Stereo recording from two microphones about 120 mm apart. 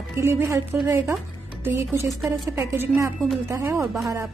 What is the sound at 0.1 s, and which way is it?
Speech, 20° right (ahead or behind).